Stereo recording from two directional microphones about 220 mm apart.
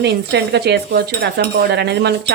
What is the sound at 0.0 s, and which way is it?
Cutlery, 50° right (ahead or behind).